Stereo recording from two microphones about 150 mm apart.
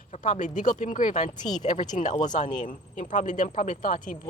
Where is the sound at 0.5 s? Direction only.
55° left (ahead or behind).